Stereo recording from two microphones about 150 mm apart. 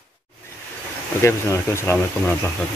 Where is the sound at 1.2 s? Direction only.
15° left (ahead or behind).